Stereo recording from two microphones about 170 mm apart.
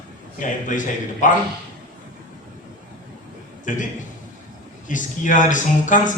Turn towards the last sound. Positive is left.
turn(degrees=50)  # may be behind; listen again after turning